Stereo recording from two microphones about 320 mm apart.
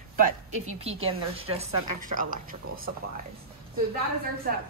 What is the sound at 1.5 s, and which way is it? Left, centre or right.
Speech, right.